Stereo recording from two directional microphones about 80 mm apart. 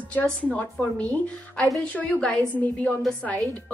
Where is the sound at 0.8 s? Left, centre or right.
Centre.